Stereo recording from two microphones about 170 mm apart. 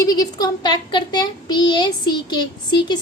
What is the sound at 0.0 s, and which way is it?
A child's voice, 20° left (ahead or behind).